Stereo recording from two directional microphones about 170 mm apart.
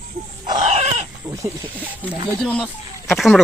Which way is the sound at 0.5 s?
40° right (ahead or behind).